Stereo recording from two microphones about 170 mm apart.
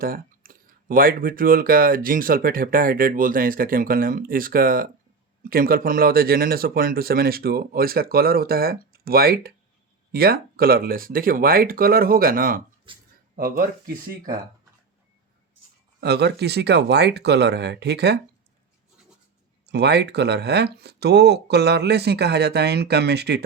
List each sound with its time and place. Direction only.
0.0 s speech: 55° right (ahead or behind)
12.9 s a sound: 30° right (ahead or behind)
13.3 s speech: 60° right (ahead or behind)
16.0 s speech: 75° right (ahead or behind)
19.6 s speech: 80° right